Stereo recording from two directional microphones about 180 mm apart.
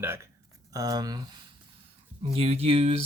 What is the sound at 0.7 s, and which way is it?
Speech, 20° right (ahead or behind).